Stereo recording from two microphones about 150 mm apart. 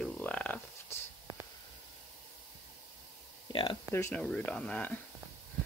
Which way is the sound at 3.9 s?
15° left (ahead or behind).